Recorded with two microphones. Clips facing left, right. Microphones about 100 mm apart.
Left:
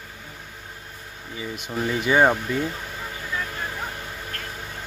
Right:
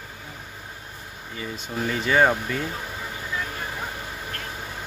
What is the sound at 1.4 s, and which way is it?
Speech, 10° left (ahead or behind).